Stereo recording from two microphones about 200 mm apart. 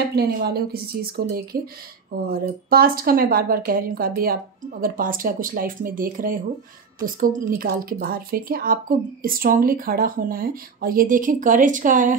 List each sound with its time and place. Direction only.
0.1 s speech: 50° right (ahead or behind)